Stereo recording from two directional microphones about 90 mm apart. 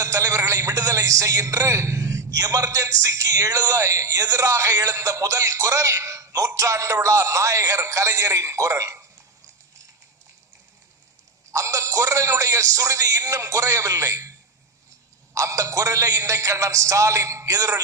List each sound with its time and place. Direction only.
0.0 s a man's voice: 35° right (ahead or behind)
11.5 s speech: 35° right (ahead or behind)
15.4 s a man's voice: 35° right (ahead or behind)